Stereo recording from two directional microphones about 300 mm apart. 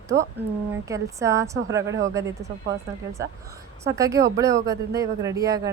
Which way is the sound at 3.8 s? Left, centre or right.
Centre.